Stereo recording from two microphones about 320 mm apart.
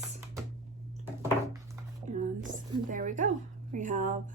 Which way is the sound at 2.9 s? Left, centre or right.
Right.